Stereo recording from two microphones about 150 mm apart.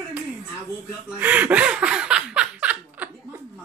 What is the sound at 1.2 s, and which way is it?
Laughter, 10° right (ahead or behind).